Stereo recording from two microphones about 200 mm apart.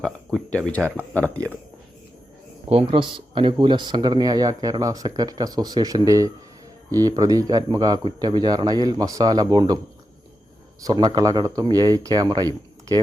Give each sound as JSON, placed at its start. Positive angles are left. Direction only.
{"t": 0.0, "sound": "speech", "side_deg": 5}
{"t": 2.6, "sound": "speech", "side_deg": -25}
{"t": 10.8, "sound": "speech", "side_deg": -20}